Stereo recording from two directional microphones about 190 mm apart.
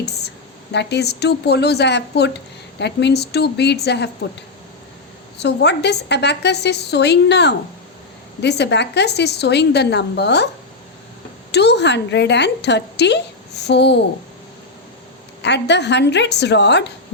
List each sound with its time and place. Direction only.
0.7 s a woman's voice: 65° left (ahead or behind)
5.4 s a woman's voice: 65° left (ahead or behind)
11.5 s a woman's voice: 60° left (ahead or behind)
15.4 s a woman's voice: 65° left (ahead or behind)